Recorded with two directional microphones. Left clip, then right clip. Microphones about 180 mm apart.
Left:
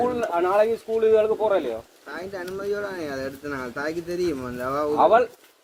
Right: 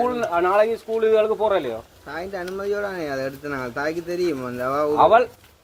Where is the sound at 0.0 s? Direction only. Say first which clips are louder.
Right 2 dB; 15° left (ahead or behind).